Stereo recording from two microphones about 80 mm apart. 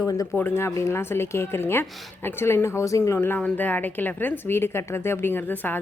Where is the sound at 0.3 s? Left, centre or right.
Left.